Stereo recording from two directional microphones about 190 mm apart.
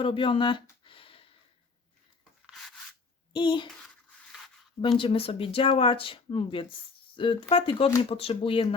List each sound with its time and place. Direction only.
0.0 s speech: 25° left (ahead or behind)
3.3 s speech: 25° left (ahead or behind)
4.8 s speech: 25° left (ahead or behind)